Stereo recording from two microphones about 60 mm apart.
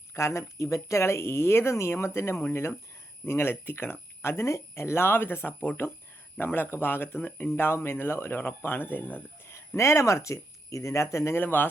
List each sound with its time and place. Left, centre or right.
0.1 s speech: left
9.5 s speech: left
11.3 s speech: left